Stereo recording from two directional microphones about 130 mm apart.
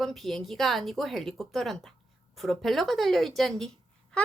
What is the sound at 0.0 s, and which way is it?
A woman's voice, centre (ahead or behind).